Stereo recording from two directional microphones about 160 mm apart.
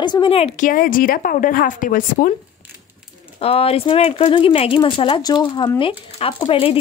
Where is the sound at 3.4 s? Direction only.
35° left (ahead or behind).